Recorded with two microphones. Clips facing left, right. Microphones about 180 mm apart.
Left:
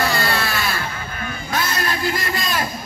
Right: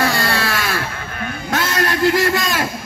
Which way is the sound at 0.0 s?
90° right.